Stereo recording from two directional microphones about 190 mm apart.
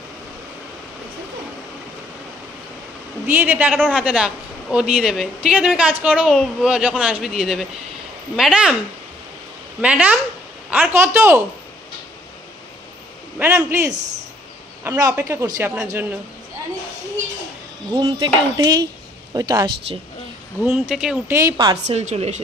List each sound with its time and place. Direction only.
3.3 s a woman's voice: 10° right (ahead or behind)
9.8 s speech: 5° right (ahead or behind)
13.4 s speech: 10° right (ahead or behind)
17.9 s speech: 20° right (ahead or behind)
20.9 s a woman's voice: 5° right (ahead or behind)
21.4 s speech: 20° right (ahead or behind)
21.8 s a woman's voice: 35° right (ahead or behind)